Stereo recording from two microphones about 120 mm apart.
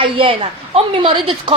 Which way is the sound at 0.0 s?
45° right (ahead or behind).